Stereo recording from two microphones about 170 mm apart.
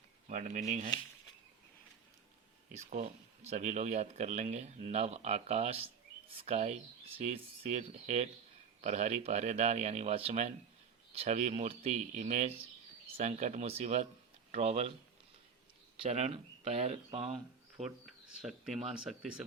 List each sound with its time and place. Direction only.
0.3 s speech: 45° right (ahead or behind)
2.7 s speech: 40° right (ahead or behind)
16.0 s speech: 40° right (ahead or behind)
17.8 s speech: 5° right (ahead or behind)